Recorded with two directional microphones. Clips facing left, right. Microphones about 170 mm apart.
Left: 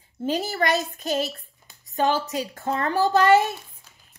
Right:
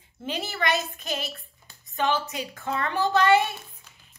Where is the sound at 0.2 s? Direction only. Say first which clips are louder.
Left 5 dB; 40° left (ahead or behind).